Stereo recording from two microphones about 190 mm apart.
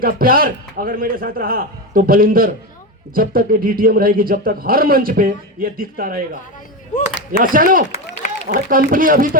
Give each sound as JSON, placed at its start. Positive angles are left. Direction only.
{"t": 0.0, "sound": "a man's voice", "side_deg": -50}
{"t": 7.4, "sound": "a man's voice", "side_deg": -45}
{"t": 7.9, "sound": "run", "side_deg": 35}
{"t": 8.4, "sound": "a man's voice", "side_deg": -45}